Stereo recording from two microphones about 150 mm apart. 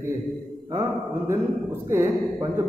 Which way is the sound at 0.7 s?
15° right (ahead or behind).